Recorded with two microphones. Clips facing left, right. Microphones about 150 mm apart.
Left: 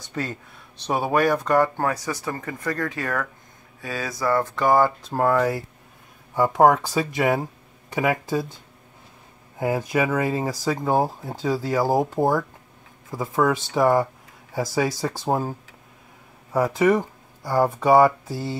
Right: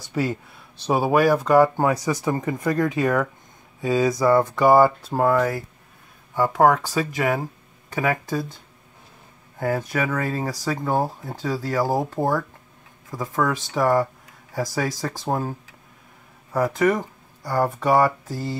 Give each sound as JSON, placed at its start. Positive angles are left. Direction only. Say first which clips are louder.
{"t": 0.1, "sound": "speech", "louder": "right 5 dB", "side_deg": -5}
{"t": 6.6, "sound": "speech", "louder": "left 1 dB", "side_deg": 0}
{"t": 7.2, "sound": "speech", "louder": "left 1 dB", "side_deg": 15}
{"t": 9.6, "sound": "speech", "louder": "left 1 dB", "side_deg": 15}
{"t": 16.7, "sound": "speech", "louder": "left 2 dB", "side_deg": 10}